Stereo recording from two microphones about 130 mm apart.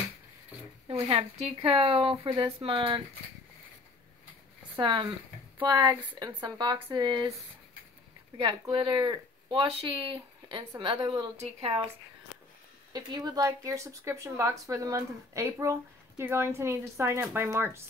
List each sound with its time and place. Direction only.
1.0 s speech: 45° right (ahead or behind)
4.7 s speech: 35° right (ahead or behind)
8.4 s a woman's voice: 40° right (ahead or behind)
12.9 s speech: 30° right (ahead or behind)